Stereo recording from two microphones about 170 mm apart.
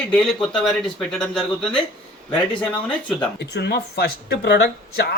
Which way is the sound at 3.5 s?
75° left (ahead or behind).